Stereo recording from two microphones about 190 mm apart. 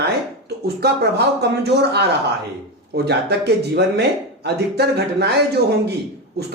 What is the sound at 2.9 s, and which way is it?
Speech, 60° right (ahead or behind).